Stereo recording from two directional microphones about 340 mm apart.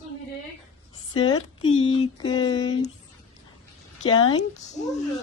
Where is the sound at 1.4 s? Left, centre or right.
Left.